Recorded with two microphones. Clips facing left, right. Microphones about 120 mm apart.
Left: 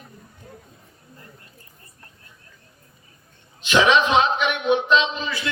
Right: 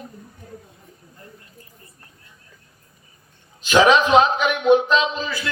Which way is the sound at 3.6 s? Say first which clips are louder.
Right 3 dB; 40° right (ahead or behind).